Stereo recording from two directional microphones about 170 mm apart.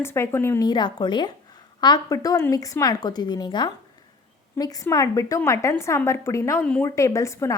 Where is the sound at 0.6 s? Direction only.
25° left (ahead or behind).